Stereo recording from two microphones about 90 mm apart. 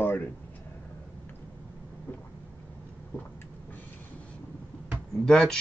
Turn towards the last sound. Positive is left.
turn(degrees=5)  # may be behind; listen again after turning